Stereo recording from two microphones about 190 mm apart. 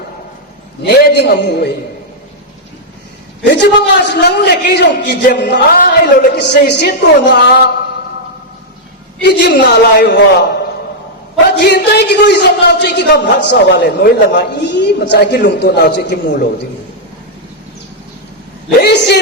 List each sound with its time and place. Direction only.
0.8 s a man's voice: 60° left (ahead or behind)
3.4 s a man's voice: 65° left (ahead or behind)
9.2 s a man's voice: 65° left (ahead or behind)
11.5 s a man's voice: 60° left (ahead or behind)
18.8 s a man's voice: 60° left (ahead or behind)